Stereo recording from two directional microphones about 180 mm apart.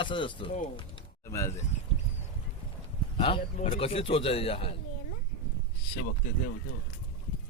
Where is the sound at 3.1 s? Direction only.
30° left (ahead or behind).